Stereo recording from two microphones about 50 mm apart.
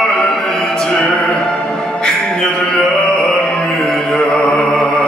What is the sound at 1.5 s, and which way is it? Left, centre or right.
Music, centre.